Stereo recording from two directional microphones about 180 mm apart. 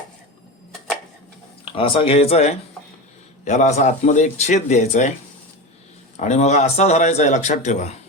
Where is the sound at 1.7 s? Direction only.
30° left (ahead or behind).